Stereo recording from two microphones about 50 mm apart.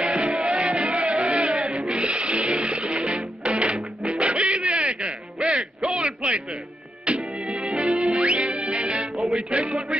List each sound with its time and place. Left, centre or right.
0.1 s music: centre
1.9 s a sound: centre
2.6 s music: centre
5.9 s a sound: centre
7.2 s music: right
8.0 s music: centre
8.3 s music: right
8.8 s music: centre
9.4 s music: centre